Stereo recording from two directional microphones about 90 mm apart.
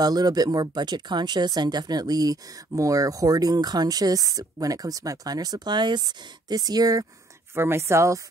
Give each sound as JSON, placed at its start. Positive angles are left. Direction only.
{"t": 0.0, "sound": "speech", "side_deg": -45}
{"t": 7.5, "sound": "speech", "side_deg": -30}